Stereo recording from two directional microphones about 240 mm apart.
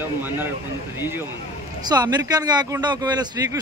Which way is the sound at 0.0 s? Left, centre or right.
Centre.